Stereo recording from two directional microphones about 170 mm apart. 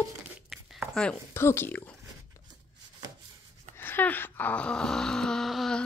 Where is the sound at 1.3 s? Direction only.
15° left (ahead or behind).